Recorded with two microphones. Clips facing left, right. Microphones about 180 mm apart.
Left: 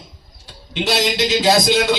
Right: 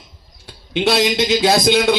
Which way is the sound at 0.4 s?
60° right (ahead or behind).